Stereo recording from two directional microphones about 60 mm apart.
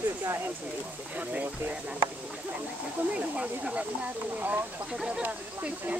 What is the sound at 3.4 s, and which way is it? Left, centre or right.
Speech, centre.